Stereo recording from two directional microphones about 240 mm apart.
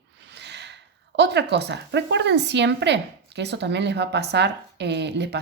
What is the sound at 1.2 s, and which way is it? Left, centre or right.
A woman's voice, right.